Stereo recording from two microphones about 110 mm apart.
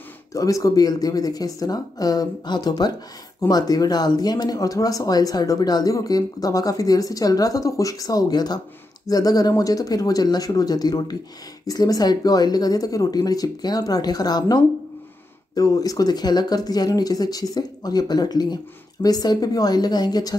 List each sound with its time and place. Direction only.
0.3 s speech: 30° left (ahead or behind)